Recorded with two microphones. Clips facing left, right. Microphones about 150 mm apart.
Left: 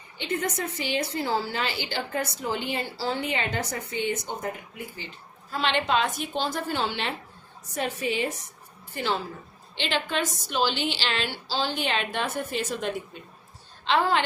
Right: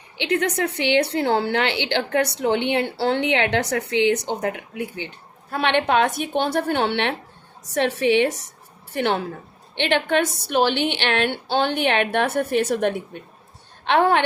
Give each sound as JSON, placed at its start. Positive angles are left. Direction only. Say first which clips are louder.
{"t": 0.2, "sound": "a woman's voice", "louder": "right 7 dB", "side_deg": -70}
{"t": 7.6, "sound": "a woman's voice", "louder": "right 9 dB", "side_deg": -85}
{"t": 8.9, "sound": "a woman's voice", "louder": "right 6 dB", "side_deg": -65}